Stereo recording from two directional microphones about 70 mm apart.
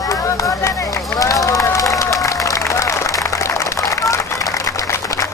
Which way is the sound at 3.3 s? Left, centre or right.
Left.